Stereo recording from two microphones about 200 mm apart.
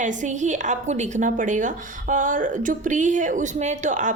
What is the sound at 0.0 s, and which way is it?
A woman's voice, 40° right (ahead or behind).